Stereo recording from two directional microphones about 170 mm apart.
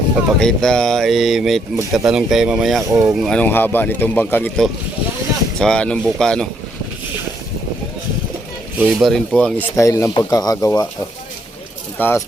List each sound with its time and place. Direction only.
0.3 s speech: 5° left (ahead or behind)
8.8 s speech: 5° right (ahead or behind)
9.7 s speech: 15° left (ahead or behind)
11.9 s speech: 10° left (ahead or behind)